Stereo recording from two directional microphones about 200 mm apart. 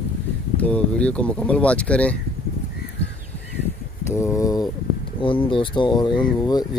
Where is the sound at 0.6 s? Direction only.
5° left (ahead or behind).